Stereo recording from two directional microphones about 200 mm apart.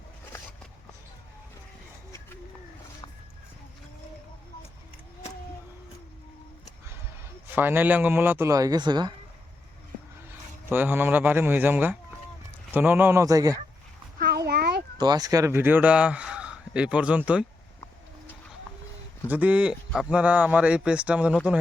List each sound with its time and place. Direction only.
7.5 s a man's voice: 10° right (ahead or behind)
10.7 s a man's voice: 10° right (ahead or behind)
14.2 s a sound: 55° right (ahead or behind)
14.9 s speech: 20° right (ahead or behind)
19.3 s a man's voice: 10° right (ahead or behind)